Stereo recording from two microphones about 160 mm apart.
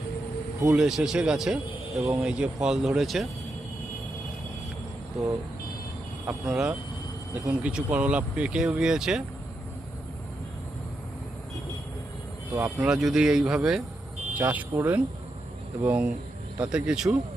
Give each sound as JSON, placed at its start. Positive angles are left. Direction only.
{"t": 0.7, "sound": "speech", "side_deg": -5}
{"t": 6.2, "sound": "speech", "side_deg": -5}
{"t": 12.5, "sound": "speech", "side_deg": -5}